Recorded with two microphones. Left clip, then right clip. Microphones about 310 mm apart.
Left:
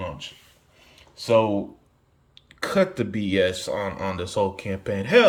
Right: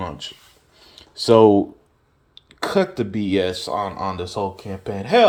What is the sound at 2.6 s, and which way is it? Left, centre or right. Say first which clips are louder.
Speech: right 2 dB; centre.